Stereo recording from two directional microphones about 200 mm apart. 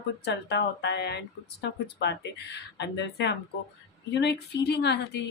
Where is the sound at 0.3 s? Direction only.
55° left (ahead or behind).